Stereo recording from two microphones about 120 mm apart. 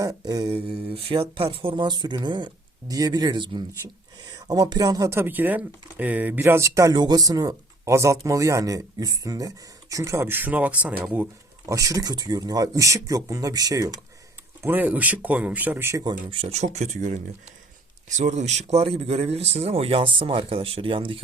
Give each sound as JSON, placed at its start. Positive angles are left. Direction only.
{"t": 0.0, "sound": "mantra", "side_deg": -30}
{"t": 0.5, "sound": "speech", "side_deg": -50}
{"t": 11.6, "sound": "speech", "side_deg": -25}
{"t": 14.6, "sound": "speech", "side_deg": -15}
{"t": 16.3, "sound": "speech", "side_deg": -60}
{"t": 18.2, "sound": "speech", "side_deg": -80}